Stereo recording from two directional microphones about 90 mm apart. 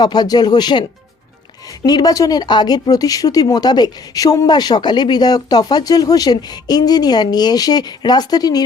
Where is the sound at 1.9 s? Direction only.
45° left (ahead or behind).